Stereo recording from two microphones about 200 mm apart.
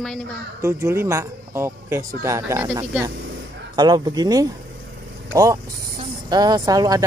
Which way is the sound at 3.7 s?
20° right (ahead or behind).